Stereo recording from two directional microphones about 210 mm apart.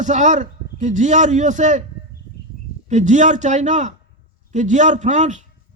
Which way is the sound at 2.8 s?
35° right (ahead or behind).